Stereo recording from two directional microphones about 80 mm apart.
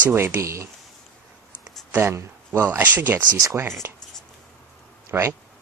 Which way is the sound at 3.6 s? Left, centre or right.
Right.